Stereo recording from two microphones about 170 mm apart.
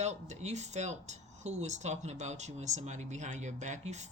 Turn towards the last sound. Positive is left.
turn(degrees=-40)  # may be behind; listen again after turning